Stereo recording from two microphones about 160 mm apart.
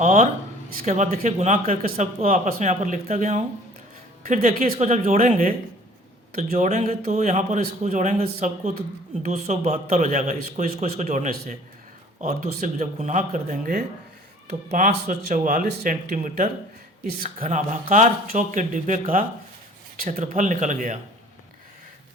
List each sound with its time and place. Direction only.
0.0 s a man's voice: 40° right (ahead or behind); by 2.0 s 65° right (ahead or behind)
2.2 s a man's voice: 45° right (ahead or behind)
4.3 s speech: 60° right (ahead or behind)
6.6 s a man's voice: 45° right (ahead or behind)
20.0 s a man's voice: 55° right (ahead or behind)